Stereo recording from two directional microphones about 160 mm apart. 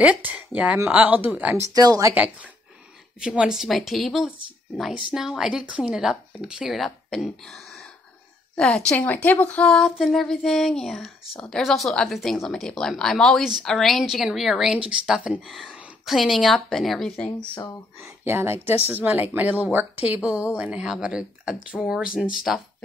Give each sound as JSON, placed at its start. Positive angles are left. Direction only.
{"t": 0.0, "sound": "speech", "side_deg": -10}
{"t": 1.7, "sound": "speech", "side_deg": -25}
{"t": 2.1, "sound": "a woman's voice", "side_deg": -10}
{"t": 18.0, "sound": "a woman's voice", "side_deg": -15}